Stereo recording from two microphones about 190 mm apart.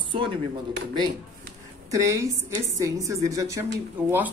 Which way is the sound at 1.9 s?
15° right (ahead or behind).